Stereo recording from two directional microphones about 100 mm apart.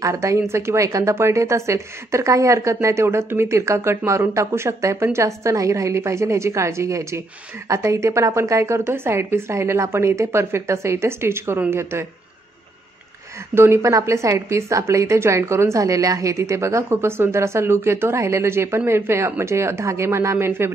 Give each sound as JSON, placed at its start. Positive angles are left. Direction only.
{"t": 0.0, "sound": "a woman's voice", "side_deg": -30}
{"t": 13.6, "sound": "a woman's voice", "side_deg": -30}